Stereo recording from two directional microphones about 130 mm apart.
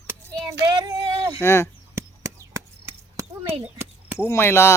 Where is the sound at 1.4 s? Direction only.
20° left (ahead or behind).